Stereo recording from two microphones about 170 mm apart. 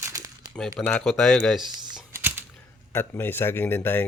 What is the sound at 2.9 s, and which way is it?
Speech, 15° left (ahead or behind).